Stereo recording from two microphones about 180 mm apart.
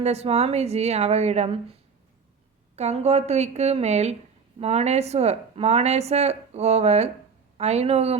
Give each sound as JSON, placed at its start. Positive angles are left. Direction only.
{"t": 0.0, "sound": "speech", "side_deg": -35}
{"t": 2.7, "sound": "speech", "side_deg": -40}